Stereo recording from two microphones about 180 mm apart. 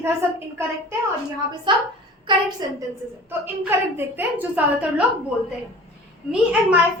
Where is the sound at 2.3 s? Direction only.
25° right (ahead or behind).